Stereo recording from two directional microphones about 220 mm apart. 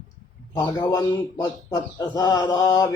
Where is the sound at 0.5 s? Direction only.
20° left (ahead or behind).